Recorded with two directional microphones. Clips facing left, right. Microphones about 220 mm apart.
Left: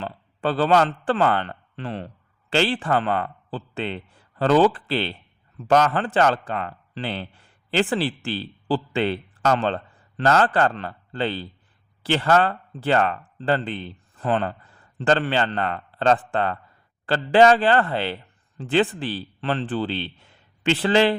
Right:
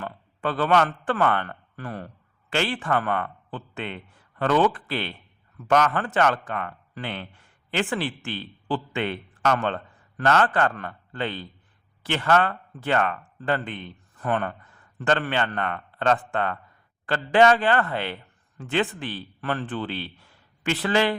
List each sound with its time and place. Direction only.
0.0 s a man's voice: 30° left (ahead or behind)